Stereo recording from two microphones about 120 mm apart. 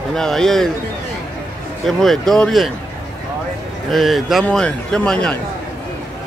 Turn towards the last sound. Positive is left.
turn(degrees=5)  # may be behind; listen again after turning